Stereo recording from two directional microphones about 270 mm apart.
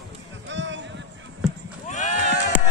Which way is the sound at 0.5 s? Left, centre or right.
Right.